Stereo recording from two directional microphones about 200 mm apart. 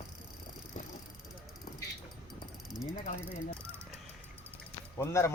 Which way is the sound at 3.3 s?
10° right (ahead or behind).